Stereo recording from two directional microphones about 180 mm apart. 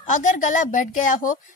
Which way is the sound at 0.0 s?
45° left (ahead or behind).